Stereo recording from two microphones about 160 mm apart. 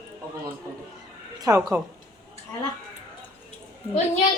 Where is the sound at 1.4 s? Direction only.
20° right (ahead or behind).